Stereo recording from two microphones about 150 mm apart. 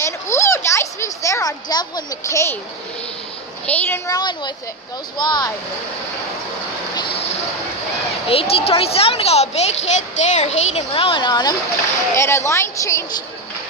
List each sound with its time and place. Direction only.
0.0 s a sound: 20° left (ahead or behind)
3.6 s speech: 10° left (ahead or behind); by 5.5 s 30° left (ahead or behind)
8.3 s a woman's voice: 40° left (ahead or behind)
12.2 s speech: 20° left (ahead or behind)